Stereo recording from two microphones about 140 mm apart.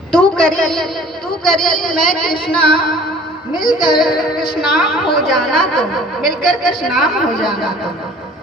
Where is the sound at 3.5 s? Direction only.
35° left (ahead or behind).